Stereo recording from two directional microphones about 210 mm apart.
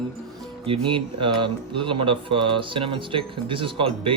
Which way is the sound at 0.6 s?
25° right (ahead or behind).